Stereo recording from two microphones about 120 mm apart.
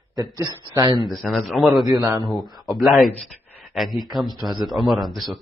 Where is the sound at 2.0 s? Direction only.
20° right (ahead or behind).